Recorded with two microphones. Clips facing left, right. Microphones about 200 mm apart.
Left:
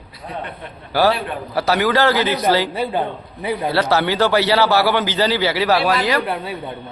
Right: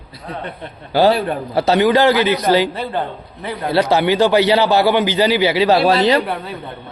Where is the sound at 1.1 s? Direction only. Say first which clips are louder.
Right 4 dB; 25° right (ahead or behind).